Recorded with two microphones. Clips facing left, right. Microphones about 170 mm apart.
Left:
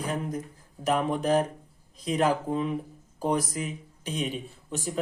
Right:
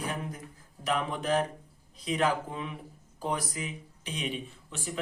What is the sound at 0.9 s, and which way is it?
A man's voice, 40° left (ahead or behind).